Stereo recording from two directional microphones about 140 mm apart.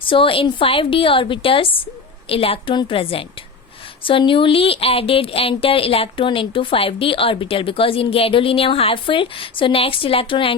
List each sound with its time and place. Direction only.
0.0 s speech: 40° left (ahead or behind)